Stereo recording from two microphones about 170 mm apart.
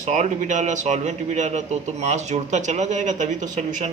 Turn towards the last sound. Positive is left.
turn(degrees=-50)  # may be behind; listen again after turning